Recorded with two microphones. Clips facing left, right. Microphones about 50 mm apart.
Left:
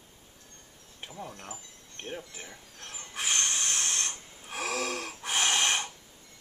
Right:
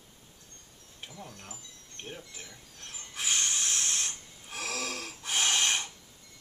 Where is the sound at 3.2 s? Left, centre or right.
Centre.